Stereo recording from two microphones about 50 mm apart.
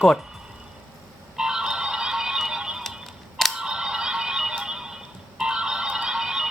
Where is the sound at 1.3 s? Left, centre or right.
Centre.